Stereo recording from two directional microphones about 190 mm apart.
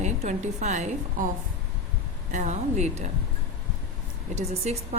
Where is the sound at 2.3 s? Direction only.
40° right (ahead or behind).